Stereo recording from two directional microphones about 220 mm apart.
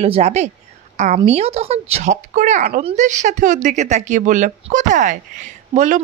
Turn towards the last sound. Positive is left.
turn(degrees=-35)  # may be behind; listen again after turning